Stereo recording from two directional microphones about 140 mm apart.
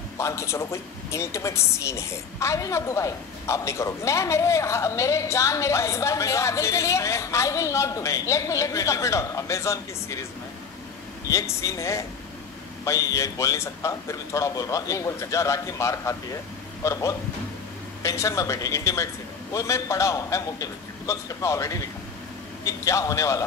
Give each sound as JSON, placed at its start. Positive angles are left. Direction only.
{"t": 0.2, "sound": "speech", "side_deg": 20}
{"t": 11.2, "sound": "speech", "side_deg": 20}